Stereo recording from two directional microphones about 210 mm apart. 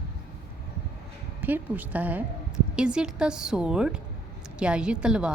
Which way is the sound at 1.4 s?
10° right (ahead or behind).